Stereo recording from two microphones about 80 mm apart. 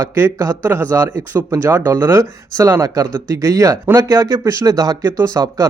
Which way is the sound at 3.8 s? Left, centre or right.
Right.